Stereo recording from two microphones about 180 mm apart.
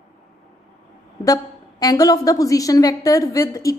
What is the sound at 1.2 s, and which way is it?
A woman's voice, 20° left (ahead or behind).